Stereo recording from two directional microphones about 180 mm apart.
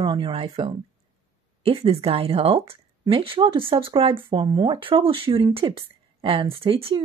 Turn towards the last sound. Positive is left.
turn(degrees=-30)  # may be behind; listen again after turning